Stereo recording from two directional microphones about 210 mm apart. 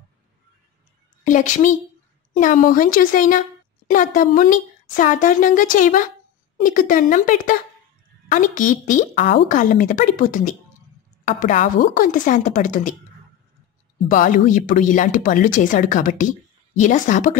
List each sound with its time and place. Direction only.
1.2 s a woman's voice: 40° left (ahead or behind)
14.0 s a woman's voice: 40° left (ahead or behind)